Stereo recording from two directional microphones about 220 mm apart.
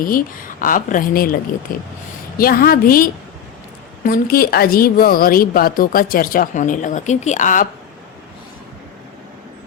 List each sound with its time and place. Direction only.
0.0 s a woman's voice: 40° left (ahead or behind)